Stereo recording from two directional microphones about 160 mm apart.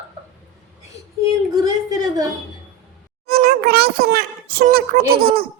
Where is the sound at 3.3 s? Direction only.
70° right (ahead or behind).